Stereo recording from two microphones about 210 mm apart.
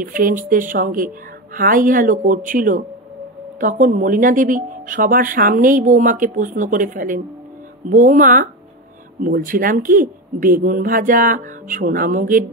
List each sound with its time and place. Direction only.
0.0 s speech: 40° right (ahead or behind)